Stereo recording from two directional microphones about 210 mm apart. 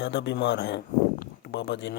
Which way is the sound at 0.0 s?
55° left (ahead or behind).